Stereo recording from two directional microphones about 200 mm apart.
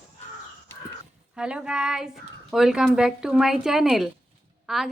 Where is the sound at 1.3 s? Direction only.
5° right (ahead or behind).